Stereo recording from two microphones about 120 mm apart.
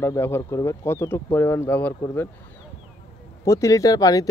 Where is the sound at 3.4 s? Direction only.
25° left (ahead or behind).